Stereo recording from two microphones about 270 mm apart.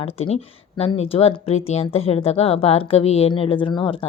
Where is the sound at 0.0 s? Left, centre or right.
Left.